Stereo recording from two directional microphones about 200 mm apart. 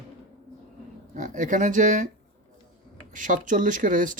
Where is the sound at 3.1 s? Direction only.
40° right (ahead or behind).